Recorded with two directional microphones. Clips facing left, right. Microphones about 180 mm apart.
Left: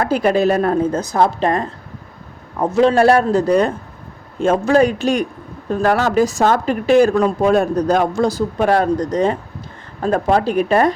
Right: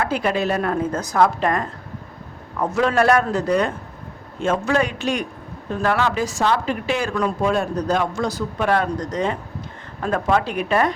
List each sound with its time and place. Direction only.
0.0 s speech: 40° left (ahead or behind)
8.2 s speech: 30° left (ahead or behind)